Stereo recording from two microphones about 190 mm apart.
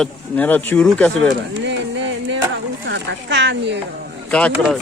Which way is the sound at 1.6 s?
70° right (ahead or behind).